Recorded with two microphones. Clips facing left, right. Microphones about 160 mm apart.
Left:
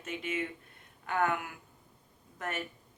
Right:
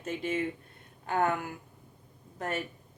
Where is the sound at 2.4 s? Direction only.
30° right (ahead or behind).